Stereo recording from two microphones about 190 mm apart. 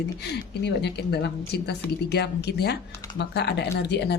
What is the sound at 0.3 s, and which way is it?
A woman's voice, 60° left (ahead or behind).